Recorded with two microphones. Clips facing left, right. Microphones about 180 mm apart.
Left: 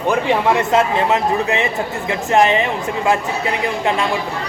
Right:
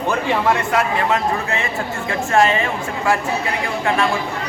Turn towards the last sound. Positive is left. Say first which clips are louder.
# left 2 dB
turn(degrees=20)  # may be behind; listen again after turning